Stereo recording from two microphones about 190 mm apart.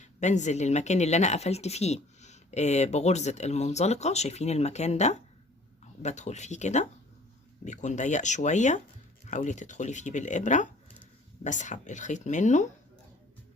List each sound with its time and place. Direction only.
0.0 s a woman's voice: 40° left (ahead or behind)